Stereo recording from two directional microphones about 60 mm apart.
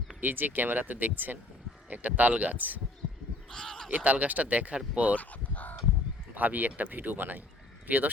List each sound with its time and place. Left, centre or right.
0.2 s speech: right
3.5 s a sound: centre
3.8 s speech: right
5.1 s crow: left
6.3 s speech: right